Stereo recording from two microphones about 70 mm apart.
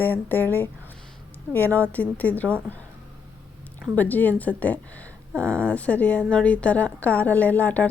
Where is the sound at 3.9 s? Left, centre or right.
Left.